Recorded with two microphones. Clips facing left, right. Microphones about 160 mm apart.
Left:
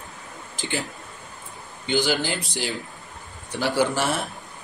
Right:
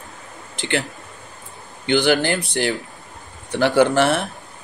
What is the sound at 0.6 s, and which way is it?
Speech, 70° right (ahead or behind).